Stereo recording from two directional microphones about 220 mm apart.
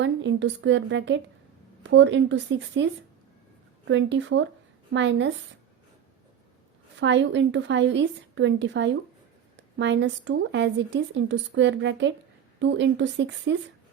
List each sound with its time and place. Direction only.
0.0 s a woman's voice: 55° right (ahead or behind)
7.0 s a woman's voice: 55° right (ahead or behind)